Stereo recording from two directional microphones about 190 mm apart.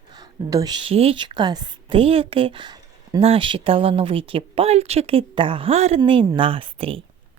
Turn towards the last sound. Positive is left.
turn(degrees=-30)  # may be behind; listen again after turning